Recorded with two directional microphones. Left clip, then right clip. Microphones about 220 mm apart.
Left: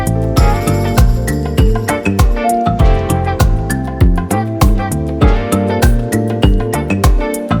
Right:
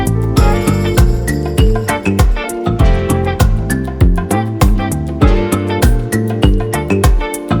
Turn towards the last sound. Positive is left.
turn(degrees=-5)  # may be behind; listen again after turning